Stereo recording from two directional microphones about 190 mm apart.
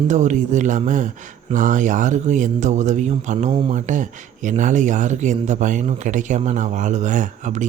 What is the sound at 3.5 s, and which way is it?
Speech, 25° right (ahead or behind).